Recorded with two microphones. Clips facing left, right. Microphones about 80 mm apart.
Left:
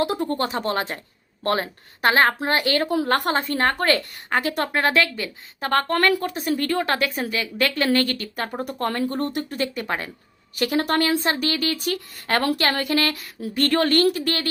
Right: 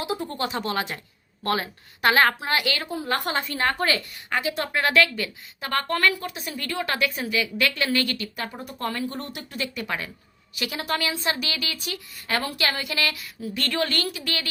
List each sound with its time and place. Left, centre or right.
0.0 s speech: left
2.8 s speech: left
3.2 s a woman's voice: left
5.5 s a woman's voice: left
11.9 s speech: left
12.5 s a woman's voice: left